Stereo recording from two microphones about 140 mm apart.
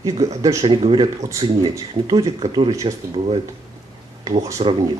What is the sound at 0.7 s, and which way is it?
Speech, 35° right (ahead or behind).